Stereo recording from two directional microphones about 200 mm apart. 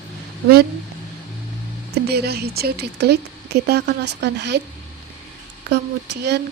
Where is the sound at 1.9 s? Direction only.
55° right (ahead or behind).